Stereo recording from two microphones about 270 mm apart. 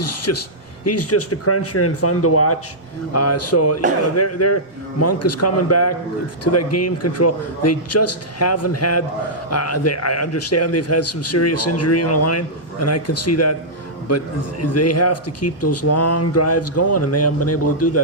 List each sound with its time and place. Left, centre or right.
0.0 s a man's voice: left